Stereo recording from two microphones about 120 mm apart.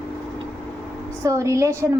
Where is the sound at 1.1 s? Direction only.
25° right (ahead or behind).